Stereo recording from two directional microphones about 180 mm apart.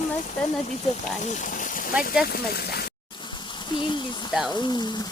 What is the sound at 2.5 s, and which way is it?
Speech, 65° left (ahead or behind).